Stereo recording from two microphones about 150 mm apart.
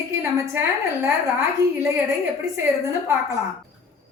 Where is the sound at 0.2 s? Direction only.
15° right (ahead or behind).